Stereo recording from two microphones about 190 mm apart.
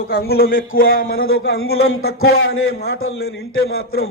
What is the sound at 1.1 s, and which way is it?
Speech, 90° left.